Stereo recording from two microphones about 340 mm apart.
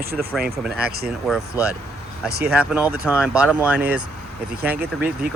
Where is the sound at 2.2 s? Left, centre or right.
Centre.